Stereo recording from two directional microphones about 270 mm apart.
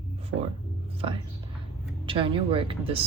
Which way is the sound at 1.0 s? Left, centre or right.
Centre.